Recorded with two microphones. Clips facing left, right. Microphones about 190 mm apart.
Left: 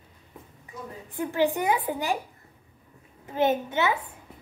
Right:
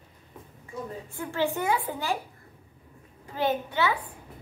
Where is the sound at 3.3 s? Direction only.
20° left (ahead or behind).